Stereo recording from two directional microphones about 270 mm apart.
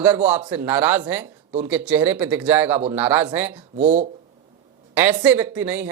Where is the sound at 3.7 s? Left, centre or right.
Right.